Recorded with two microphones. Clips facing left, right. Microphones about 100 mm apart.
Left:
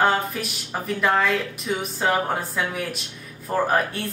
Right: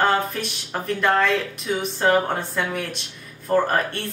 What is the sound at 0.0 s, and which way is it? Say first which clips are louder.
A woman's voice: even; centre (ahead or behind).